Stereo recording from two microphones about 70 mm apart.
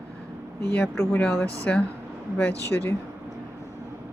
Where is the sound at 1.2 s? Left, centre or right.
Centre.